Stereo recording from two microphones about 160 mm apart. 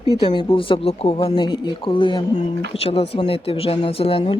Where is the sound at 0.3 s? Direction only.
35° left (ahead or behind).